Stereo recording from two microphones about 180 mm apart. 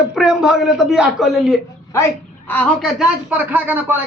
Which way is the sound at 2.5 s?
10° left (ahead or behind).